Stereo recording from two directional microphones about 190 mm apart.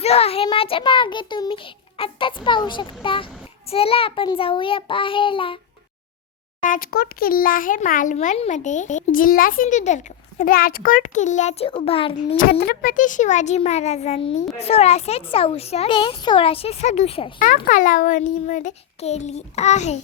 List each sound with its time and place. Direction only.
0.0 s a child's voice: 30° left (ahead or behind)
6.6 s a child's voice: 45° left (ahead or behind); by 12.4 s 30° left (ahead or behind)
12.4 s a child's voice: 55° left (ahead or behind); by 17.3 s 30° left (ahead or behind)
17.7 s a child's voice: 45° left (ahead or behind)